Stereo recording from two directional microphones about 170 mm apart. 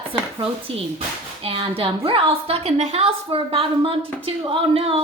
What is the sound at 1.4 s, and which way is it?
A woman's voice, 30° right (ahead or behind).